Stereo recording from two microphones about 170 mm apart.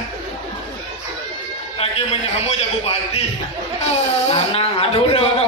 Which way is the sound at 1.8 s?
35° left (ahead or behind).